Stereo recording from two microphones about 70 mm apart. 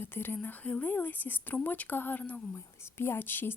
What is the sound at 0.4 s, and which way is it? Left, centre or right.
A woman's voice, left.